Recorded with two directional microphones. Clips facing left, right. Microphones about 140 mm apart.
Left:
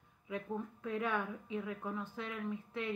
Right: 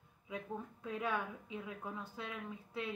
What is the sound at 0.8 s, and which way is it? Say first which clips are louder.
A woman's voice: left 2 dB; 15° right (ahead or behind).